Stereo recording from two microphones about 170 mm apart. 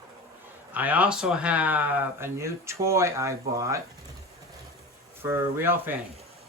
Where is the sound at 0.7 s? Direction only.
10° right (ahead or behind).